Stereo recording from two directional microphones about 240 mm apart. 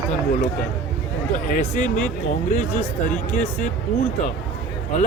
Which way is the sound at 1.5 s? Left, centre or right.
Left.